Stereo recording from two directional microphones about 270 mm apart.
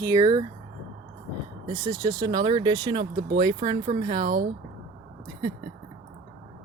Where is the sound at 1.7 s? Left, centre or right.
Centre.